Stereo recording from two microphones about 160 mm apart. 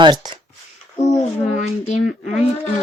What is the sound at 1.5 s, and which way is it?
Speech, 45° left (ahead or behind).